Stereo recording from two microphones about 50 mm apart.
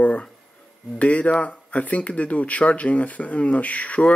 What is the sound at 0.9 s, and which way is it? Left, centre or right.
Speech, left.